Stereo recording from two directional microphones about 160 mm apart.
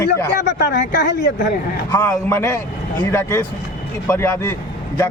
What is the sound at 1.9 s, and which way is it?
A man's voice, 10° left (ahead or behind).